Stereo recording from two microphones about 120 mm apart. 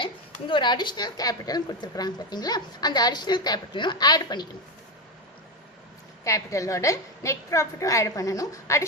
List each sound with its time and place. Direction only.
0.0 s a woman's voice: 45° left (ahead or behind)
6.2 s a woman's voice: 25° left (ahead or behind)